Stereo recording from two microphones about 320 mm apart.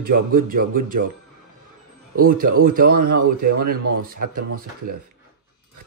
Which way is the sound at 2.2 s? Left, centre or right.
Right.